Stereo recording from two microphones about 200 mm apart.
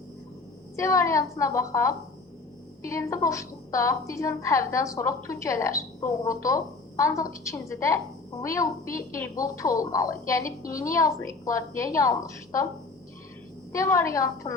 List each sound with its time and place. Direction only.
0.8 s a woman's voice: 15° left (ahead or behind)
13.7 s a woman's voice: 15° left (ahead or behind)